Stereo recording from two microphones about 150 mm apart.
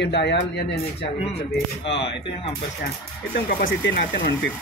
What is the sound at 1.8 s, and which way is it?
Speech, 40° left (ahead or behind).